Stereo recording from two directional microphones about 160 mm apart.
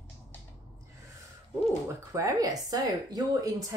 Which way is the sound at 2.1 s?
20° right (ahead or behind).